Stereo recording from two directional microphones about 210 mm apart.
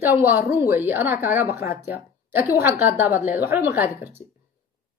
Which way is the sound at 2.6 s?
10° right (ahead or behind).